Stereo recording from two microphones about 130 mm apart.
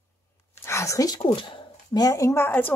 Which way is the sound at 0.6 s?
20° left (ahead or behind).